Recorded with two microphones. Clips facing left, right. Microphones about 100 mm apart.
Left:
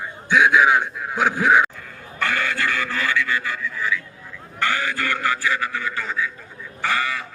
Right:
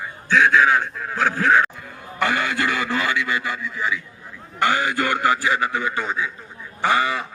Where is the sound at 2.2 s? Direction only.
15° right (ahead or behind).